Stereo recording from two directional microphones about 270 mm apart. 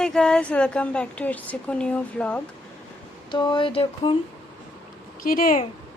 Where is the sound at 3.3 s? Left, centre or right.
Centre.